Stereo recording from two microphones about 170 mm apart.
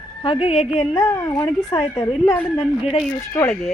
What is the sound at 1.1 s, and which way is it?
Speech, 20° left (ahead or behind).